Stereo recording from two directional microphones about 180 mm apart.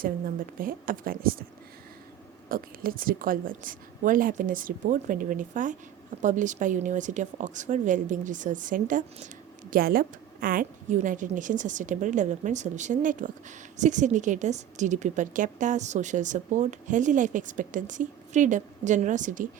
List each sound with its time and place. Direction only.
0.6 s a woman's voice: 50° right (ahead or behind)
2.5 s a woman's voice: 50° right (ahead or behind)